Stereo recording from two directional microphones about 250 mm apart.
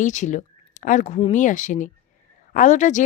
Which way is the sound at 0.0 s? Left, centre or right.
Left.